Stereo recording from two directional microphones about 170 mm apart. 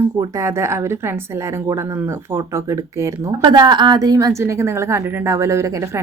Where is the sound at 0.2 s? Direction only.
15° right (ahead or behind).